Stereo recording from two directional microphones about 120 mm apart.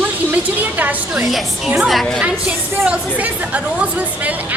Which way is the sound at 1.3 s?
Centre (ahead or behind).